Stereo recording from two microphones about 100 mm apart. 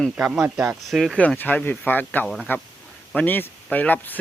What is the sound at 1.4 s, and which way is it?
Speech, 20° left (ahead or behind).